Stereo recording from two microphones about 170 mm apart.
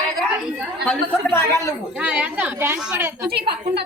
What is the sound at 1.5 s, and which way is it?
Speech, 20° left (ahead or behind).